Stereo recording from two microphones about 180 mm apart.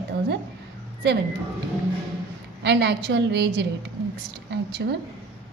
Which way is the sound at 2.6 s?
70° right (ahead or behind).